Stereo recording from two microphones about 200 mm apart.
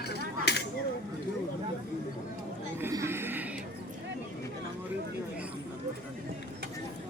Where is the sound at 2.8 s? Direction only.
15° right (ahead or behind).